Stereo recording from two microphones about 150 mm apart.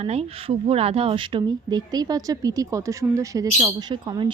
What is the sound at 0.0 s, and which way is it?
A woman's voice, 40° right (ahead or behind).